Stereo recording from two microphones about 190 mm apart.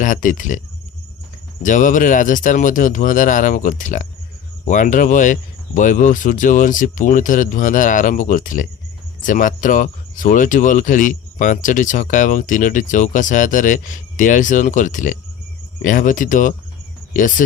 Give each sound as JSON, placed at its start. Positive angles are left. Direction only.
{"t": 0.0, "sound": "speech", "side_deg": 45}
{"t": 1.6, "sound": "speech", "side_deg": 45}